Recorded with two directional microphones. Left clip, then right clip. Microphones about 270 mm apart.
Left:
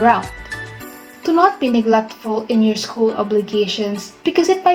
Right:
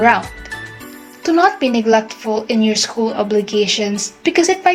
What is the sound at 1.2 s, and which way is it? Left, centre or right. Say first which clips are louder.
Speech: right 1 dB; centre.